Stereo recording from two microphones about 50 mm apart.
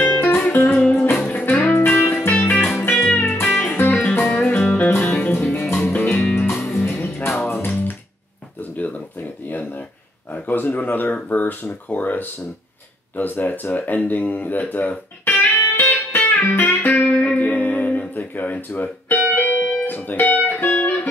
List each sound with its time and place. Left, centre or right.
0.0 s music: left
1.7 s music: left
8.7 s a sound: left
10.3 s a sound: left
10.6 s speech: left
15.2 s music: left
19.1 s music: left